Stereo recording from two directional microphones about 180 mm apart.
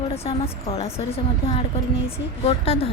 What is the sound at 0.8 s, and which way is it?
A woman's voice, 35° left (ahead or behind).